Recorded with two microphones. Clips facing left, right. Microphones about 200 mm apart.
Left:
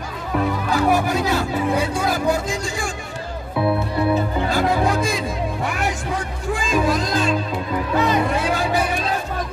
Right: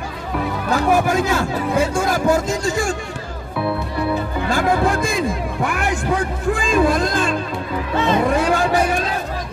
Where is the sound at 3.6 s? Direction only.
20° left (ahead or behind).